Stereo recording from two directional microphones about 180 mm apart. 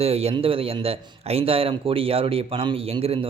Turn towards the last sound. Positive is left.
turn(degrees=-30)  # may be behind; listen again after turning